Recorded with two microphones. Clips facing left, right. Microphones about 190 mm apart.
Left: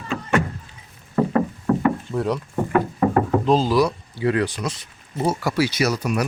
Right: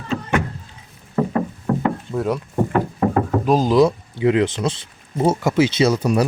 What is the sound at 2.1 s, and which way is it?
Speech, 5° right (ahead or behind).